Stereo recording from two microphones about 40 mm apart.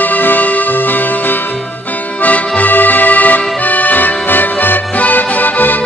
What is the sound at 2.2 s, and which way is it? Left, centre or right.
Music, left.